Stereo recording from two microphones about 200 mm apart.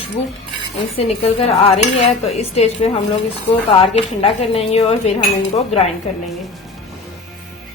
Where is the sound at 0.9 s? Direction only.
30° left (ahead or behind).